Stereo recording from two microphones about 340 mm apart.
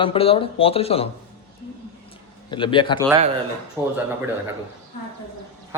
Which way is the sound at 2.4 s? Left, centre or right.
Centre.